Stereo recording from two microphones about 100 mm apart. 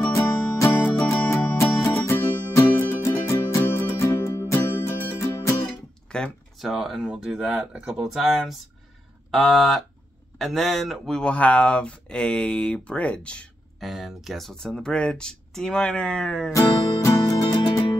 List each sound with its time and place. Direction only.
0.1 s music: 30° left (ahead or behind)
6.0 s a sound: 10° left (ahead or behind)
6.7 s speech: 5° right (ahead or behind)
13.7 s speech: centre (ahead or behind)
16.5 s music: 35° left (ahead or behind)